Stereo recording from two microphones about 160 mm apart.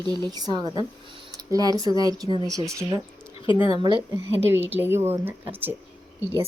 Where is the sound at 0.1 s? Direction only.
25° right (ahead or behind).